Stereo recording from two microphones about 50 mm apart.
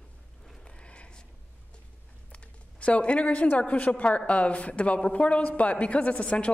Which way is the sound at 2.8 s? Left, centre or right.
Left.